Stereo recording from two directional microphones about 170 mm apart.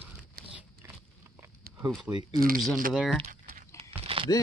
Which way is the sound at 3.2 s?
55° right (ahead or behind).